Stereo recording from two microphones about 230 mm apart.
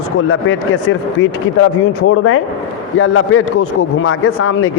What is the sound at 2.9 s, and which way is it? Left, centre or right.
A man's voice, left.